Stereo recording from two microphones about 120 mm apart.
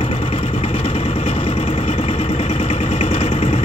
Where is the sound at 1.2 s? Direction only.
55° left (ahead or behind).